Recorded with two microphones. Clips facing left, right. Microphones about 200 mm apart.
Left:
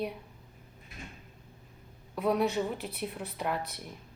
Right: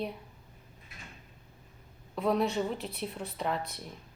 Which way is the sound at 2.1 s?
5° left (ahead or behind).